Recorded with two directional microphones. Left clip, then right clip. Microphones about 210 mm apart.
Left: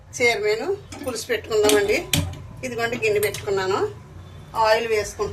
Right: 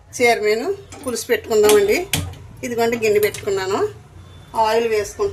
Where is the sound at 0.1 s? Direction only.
55° right (ahead or behind).